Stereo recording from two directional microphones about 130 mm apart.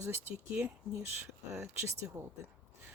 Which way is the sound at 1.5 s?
20° right (ahead or behind).